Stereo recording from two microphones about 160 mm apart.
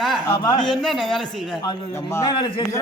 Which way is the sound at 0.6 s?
Centre (ahead or behind).